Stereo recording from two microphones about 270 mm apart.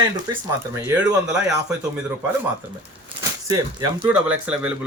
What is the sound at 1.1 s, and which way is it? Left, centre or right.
Speech, centre.